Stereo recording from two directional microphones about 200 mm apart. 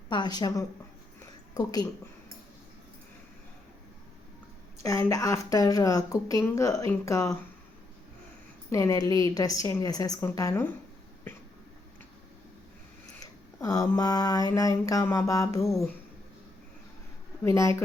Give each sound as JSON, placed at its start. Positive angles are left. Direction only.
{"t": 0.1, "sound": "a woman's voice", "side_deg": 20}
{"t": 4.8, "sound": "a woman's voice", "side_deg": 15}
{"t": 8.7, "sound": "a woman's voice", "side_deg": 15}
{"t": 13.6, "sound": "a woman's voice", "side_deg": 15}
{"t": 17.4, "sound": "a woman's voice", "side_deg": 15}